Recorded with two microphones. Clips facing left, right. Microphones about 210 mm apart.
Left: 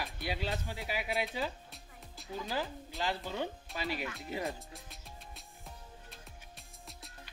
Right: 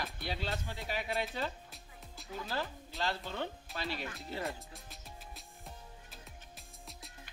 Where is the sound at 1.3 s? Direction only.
5° left (ahead or behind).